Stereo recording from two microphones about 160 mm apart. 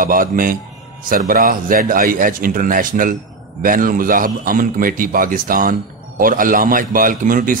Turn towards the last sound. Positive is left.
turn(degrees=-60)  # may be behind; listen again after turning